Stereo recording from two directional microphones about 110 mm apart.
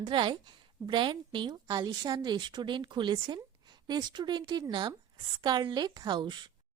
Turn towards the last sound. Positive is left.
turn(degrees=-45)  # may be behind; listen again after turning